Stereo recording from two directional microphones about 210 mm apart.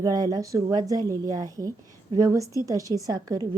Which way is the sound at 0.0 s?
15° right (ahead or behind).